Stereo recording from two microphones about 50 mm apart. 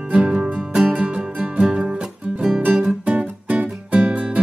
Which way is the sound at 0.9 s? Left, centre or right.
Right.